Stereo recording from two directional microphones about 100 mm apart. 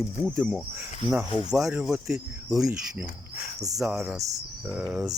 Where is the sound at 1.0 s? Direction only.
5° right (ahead or behind).